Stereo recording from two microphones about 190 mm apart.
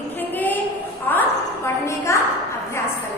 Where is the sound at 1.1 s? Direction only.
10° left (ahead or behind).